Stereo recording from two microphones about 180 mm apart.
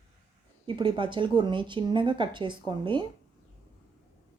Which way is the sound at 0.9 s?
25° right (ahead or behind).